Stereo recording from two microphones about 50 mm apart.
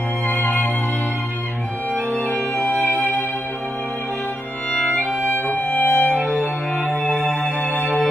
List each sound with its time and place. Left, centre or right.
2.5 s music: left
5.3 s music: left